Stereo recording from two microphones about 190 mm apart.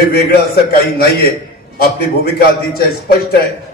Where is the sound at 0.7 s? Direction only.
55° left (ahead or behind).